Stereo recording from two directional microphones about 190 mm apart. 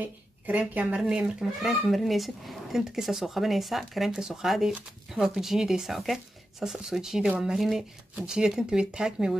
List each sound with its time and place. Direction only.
0.0 s speech: 10° right (ahead or behind)